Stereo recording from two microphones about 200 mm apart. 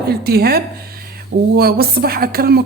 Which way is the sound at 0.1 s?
50° right (ahead or behind).